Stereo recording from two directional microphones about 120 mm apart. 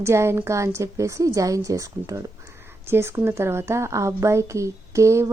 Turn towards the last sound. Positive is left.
turn(degrees=-25)  # may be behind; listen again after turning